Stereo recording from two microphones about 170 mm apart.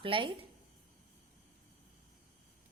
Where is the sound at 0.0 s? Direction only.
30° right (ahead or behind).